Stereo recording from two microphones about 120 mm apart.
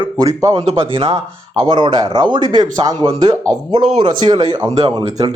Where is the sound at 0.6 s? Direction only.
55° right (ahead or behind).